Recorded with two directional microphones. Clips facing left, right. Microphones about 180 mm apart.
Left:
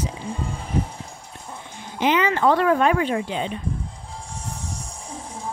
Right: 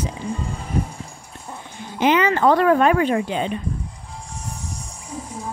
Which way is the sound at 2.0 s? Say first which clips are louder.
Right 3 dB; 50° right (ahead or behind).